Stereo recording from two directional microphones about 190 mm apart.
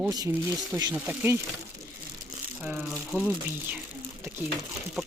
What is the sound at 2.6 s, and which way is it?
Speech, 5° right (ahead or behind).